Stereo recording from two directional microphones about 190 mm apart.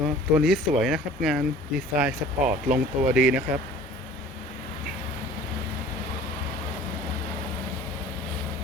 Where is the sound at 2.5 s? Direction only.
45° right (ahead or behind).